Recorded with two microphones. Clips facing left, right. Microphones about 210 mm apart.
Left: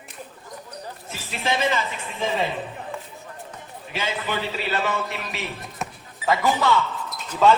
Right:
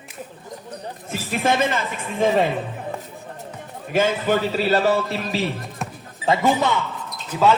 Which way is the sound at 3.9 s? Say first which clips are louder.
Right 9 dB; 50° right (ahead or behind).